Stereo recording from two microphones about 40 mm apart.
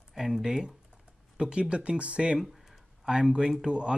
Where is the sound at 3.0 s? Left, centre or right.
Centre.